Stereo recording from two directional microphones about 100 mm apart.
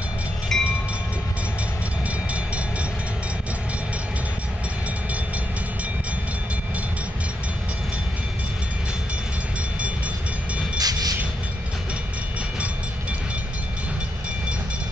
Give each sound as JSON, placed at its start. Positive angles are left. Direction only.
{"t": 0.5, "sound": "train", "side_deg": 5}
{"t": 10.8, "sound": "train", "side_deg": -40}